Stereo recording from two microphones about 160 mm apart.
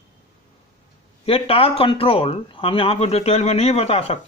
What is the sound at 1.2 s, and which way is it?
A man's voice, 35° left (ahead or behind).